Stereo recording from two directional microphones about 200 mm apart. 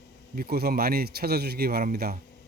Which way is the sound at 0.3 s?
50° right (ahead or behind).